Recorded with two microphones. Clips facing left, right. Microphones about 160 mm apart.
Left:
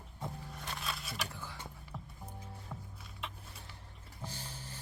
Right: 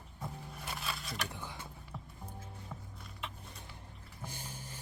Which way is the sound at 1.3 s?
20° right (ahead or behind).